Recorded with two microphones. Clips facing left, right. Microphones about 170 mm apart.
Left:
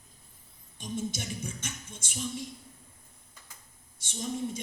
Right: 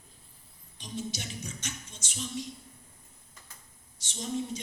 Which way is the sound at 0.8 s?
50° left (ahead or behind).